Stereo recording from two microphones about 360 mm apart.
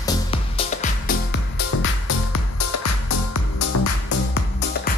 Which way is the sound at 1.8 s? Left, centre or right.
Left.